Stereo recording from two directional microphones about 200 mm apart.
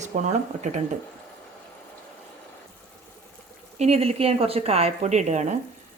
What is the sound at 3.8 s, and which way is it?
Speech, 30° right (ahead or behind).